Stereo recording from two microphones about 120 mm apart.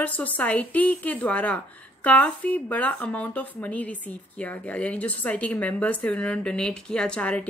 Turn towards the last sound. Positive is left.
turn(degrees=10)  # may be behind; listen again after turning